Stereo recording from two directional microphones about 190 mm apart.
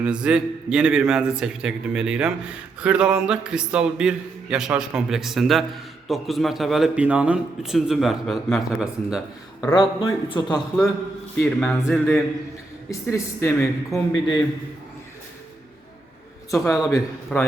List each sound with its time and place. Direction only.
0.0 s a man's voice: 5° right (ahead or behind)
9.7 s a man's voice: 25° left (ahead or behind)
11.4 s speech: 5° left (ahead or behind)
16.7 s a man's voice: 20° left (ahead or behind)
17.3 s a man's voice: 5° left (ahead or behind)